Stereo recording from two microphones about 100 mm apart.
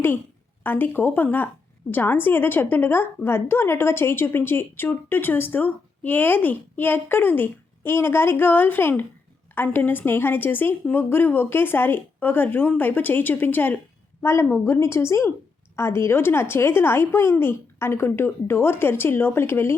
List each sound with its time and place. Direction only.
0.6 s a woman's voice: 20° left (ahead or behind)